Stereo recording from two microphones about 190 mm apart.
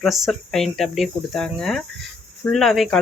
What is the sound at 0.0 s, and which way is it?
Speech, centre (ahead or behind).